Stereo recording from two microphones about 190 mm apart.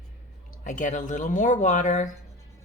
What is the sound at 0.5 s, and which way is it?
Speech, 40° left (ahead or behind).